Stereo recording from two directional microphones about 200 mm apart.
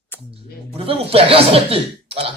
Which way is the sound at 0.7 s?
30° right (ahead or behind).